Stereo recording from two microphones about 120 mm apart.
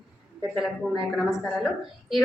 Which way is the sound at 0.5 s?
Centre (ahead or behind).